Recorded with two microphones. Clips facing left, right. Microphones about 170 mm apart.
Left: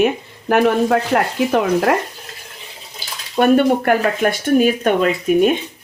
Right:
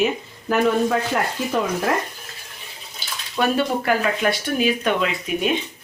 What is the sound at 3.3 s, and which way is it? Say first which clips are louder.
Speech: left 8 dB; 50° left (ahead or behind).